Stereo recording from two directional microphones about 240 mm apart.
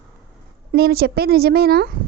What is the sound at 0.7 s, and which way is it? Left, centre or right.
Speech, right.